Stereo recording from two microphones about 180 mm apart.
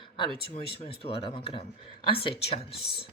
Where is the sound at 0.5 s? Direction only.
35° left (ahead or behind).